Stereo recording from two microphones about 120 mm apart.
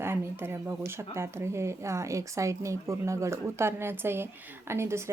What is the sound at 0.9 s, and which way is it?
A woman's voice, 20° right (ahead or behind).